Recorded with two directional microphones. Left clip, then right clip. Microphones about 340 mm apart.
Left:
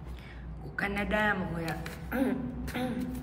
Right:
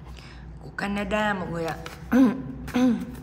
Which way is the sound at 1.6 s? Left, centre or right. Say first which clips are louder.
Right 6 dB; right.